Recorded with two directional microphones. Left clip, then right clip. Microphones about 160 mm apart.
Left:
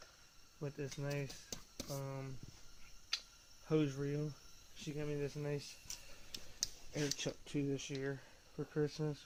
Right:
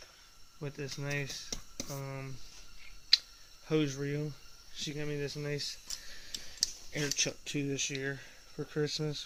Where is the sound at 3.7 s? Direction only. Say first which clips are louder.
Right 5 dB; 5° right (ahead or behind).